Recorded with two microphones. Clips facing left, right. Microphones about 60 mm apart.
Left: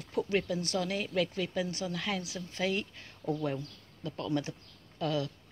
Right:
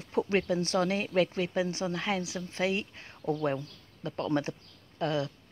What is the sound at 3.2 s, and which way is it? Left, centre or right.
Speech, centre.